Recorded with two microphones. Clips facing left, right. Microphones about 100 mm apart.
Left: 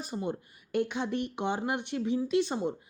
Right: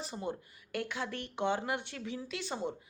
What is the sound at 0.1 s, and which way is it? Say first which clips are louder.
Speech: left 4 dB; 20° left (ahead or behind).